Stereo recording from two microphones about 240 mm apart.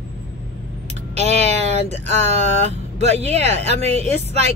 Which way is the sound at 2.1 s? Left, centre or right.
Right.